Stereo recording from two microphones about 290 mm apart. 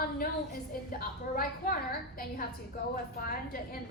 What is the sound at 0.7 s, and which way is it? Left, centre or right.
A woman's voice, left.